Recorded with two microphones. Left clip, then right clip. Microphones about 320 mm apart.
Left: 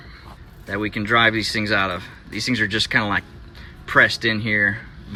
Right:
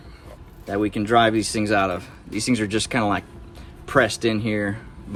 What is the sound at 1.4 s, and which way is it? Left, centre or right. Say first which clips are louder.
Speech: even; centre.